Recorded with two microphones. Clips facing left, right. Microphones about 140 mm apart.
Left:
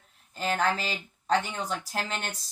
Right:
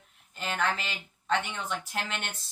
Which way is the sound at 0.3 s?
40° left (ahead or behind).